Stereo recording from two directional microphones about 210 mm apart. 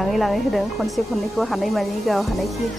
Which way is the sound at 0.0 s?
Centre (ahead or behind).